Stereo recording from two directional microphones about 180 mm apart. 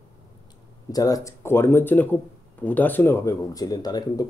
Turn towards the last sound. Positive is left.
turn(degrees=20)  # may be behind; listen again after turning